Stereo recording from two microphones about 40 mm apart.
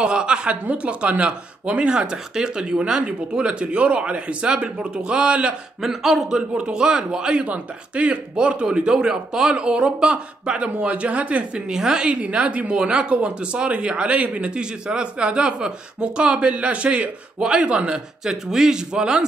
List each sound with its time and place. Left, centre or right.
0.0 s a woman's voice: right
0.7 s speech: right
5.8 s a man's voice: centre
6.5 s speech: right
7.4 s speech: right
8.6 s speech: centre; by 11.6 s right
11.7 s speech: centre
12.2 s speech: right
18.2 s a man's voice: centre